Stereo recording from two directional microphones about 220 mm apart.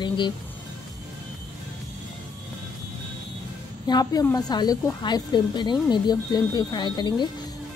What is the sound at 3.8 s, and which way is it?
A woman's voice, 15° left (ahead or behind).